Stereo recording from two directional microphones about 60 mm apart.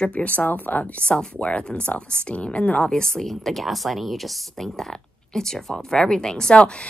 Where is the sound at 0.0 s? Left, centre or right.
Centre.